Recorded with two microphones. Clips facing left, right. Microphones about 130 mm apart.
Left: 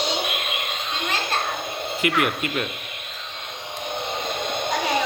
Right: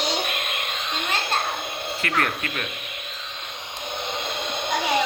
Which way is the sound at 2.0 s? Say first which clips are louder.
Left 4 dB; 15° left (ahead or behind).